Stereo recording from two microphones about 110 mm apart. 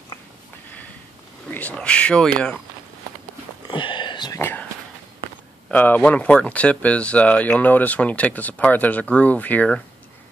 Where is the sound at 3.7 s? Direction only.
45° left (ahead or behind).